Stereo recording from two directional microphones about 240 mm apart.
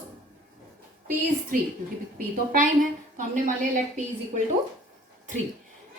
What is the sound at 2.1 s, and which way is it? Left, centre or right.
A woman's voice, right.